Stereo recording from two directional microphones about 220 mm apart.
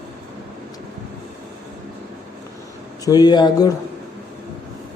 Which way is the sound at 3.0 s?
15° left (ahead or behind).